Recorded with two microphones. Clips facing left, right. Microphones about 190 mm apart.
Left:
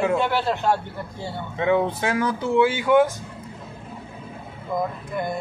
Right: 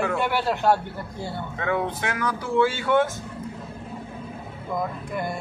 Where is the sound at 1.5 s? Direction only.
25° left (ahead or behind).